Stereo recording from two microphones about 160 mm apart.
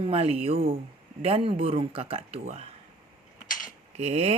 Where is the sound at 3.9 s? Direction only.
40° right (ahead or behind).